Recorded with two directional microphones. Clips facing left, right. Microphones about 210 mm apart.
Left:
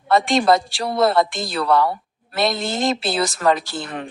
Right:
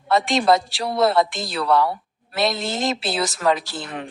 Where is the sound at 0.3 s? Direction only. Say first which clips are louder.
Left 1 dB; centre (ahead or behind).